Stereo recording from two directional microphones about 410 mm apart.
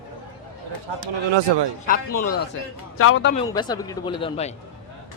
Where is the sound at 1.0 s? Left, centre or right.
Right.